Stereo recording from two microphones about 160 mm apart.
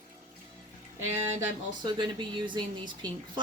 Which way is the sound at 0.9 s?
15° right (ahead or behind).